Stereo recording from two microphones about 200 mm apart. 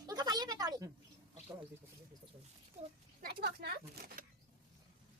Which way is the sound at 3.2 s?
50° right (ahead or behind).